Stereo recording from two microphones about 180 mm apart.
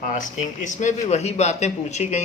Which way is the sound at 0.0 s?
45° left (ahead or behind).